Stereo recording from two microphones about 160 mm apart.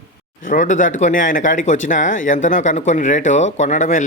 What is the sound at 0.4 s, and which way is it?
Speech, 55° left (ahead or behind).